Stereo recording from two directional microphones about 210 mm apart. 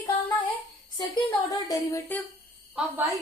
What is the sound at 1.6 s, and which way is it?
Speech, 15° left (ahead or behind).